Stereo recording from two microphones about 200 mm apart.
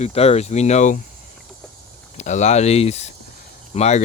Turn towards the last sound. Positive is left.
turn(degrees=35)  # may be behind; listen again after turning